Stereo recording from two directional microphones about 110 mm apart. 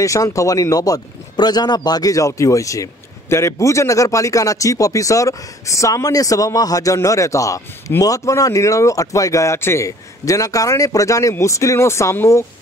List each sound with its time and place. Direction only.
0.0 s a man's voice: 30° left (ahead or behind)